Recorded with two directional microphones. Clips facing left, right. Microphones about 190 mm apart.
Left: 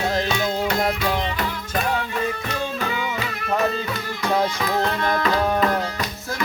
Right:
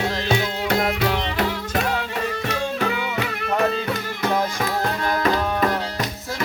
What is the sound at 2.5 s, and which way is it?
Music, 65° right (ahead or behind).